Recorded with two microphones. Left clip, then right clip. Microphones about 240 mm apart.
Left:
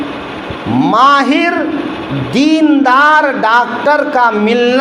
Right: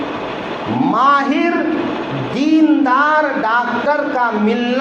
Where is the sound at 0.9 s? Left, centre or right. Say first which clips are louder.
Left 5 dB; left.